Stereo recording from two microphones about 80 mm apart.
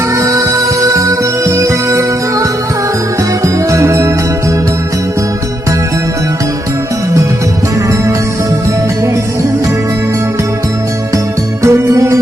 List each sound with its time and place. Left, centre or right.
0.2 s music: right
11.6 s music: right